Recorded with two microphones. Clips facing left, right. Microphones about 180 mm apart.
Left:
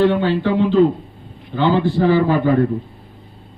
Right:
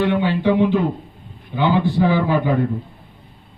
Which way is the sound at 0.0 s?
15° right (ahead or behind).